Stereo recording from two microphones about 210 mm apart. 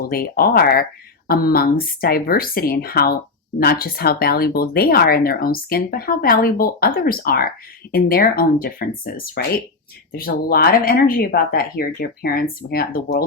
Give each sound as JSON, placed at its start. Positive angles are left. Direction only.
{"t": 0.0, "sound": "speech", "side_deg": 45}